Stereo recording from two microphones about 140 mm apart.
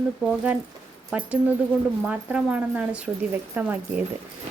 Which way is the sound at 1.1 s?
10° right (ahead or behind).